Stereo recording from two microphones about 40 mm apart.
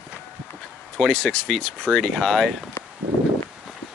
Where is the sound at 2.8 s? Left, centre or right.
Left.